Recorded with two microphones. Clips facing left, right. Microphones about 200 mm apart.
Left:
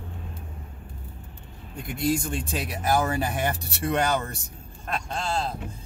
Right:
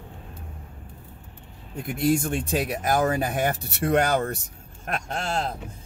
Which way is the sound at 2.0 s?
55° right (ahead or behind).